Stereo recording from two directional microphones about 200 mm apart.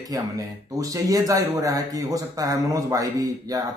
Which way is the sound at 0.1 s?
15° right (ahead or behind).